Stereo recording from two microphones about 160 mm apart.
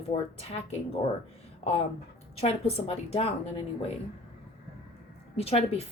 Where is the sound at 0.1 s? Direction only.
40° left (ahead or behind).